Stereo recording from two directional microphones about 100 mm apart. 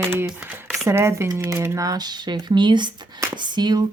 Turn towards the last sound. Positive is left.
turn(degrees=-45)  # may be behind; listen again after turning